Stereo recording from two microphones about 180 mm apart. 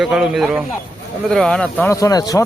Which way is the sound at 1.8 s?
20° left (ahead or behind).